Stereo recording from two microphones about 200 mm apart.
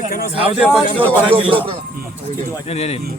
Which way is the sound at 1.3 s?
25° right (ahead or behind).